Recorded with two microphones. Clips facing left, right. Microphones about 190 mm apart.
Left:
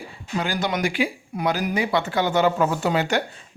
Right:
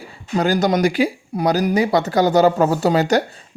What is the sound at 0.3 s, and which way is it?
Speech, 40° right (ahead or behind).